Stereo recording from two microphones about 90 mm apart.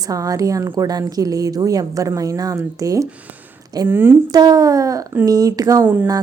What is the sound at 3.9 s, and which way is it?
Speech, 25° right (ahead or behind).